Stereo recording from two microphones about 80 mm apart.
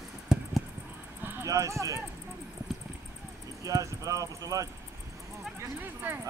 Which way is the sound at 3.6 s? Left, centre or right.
Right.